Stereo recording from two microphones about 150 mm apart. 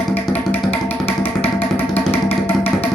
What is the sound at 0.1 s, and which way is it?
Music, 10° left (ahead or behind).